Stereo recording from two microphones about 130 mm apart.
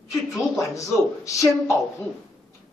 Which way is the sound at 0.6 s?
25° left (ahead or behind).